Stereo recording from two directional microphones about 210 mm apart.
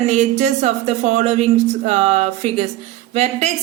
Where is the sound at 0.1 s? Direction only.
30° right (ahead or behind).